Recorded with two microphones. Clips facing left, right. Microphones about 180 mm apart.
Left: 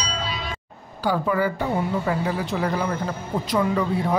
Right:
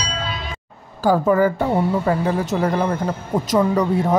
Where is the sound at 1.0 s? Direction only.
45° right (ahead or behind).